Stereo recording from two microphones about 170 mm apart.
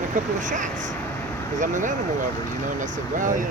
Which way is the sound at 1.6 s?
50° right (ahead or behind).